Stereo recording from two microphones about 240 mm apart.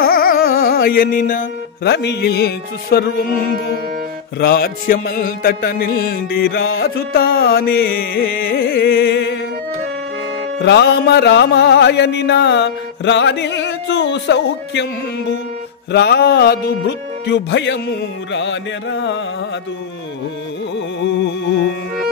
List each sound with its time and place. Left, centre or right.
0.0 s music: left
4.4 s music: left
10.6 s music: left
20.7 s music: left